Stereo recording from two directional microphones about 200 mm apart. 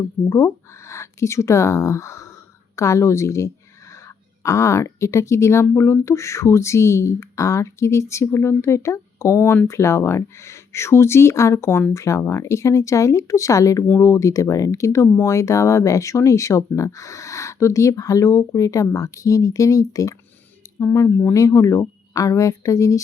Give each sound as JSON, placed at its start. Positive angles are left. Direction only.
{"t": 0.3, "sound": "speech", "side_deg": 15}